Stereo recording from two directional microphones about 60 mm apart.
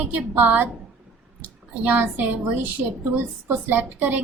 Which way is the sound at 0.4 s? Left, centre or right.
Right.